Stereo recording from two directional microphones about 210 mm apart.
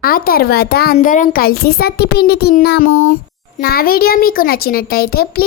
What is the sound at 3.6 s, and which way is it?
A child's voice, 45° left (ahead or behind).